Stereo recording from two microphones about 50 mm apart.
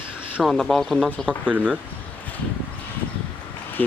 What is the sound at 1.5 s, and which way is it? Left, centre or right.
Speech, right.